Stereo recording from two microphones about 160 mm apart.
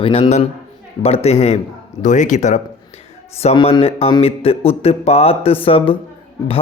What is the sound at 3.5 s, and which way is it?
Speech, 35° left (ahead or behind).